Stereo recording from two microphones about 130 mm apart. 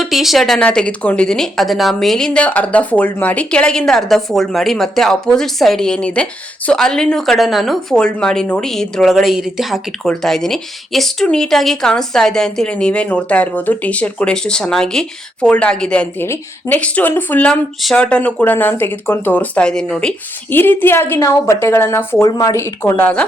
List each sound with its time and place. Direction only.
0.0 s speech: centre (ahead or behind)